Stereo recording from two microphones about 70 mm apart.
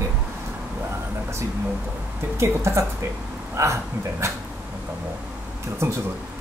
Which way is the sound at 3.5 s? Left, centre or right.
Right.